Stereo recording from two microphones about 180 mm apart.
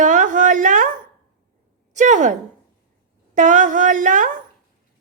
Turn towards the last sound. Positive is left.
turn(degrees=-45)  # may be behind; listen again after turning